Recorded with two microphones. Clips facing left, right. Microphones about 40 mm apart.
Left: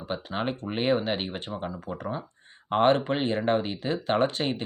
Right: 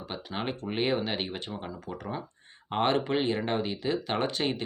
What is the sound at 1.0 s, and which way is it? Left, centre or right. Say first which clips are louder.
Speech: left 3 dB; left.